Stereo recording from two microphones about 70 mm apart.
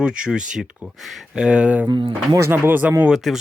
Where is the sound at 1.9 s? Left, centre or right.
Right.